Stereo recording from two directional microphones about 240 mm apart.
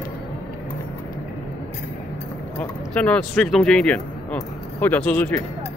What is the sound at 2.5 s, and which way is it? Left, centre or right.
Speech, centre.